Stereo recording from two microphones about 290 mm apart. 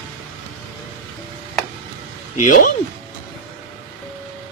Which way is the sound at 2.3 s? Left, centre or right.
Left.